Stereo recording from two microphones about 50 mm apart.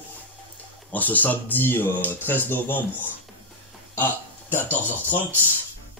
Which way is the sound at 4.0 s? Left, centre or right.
Left.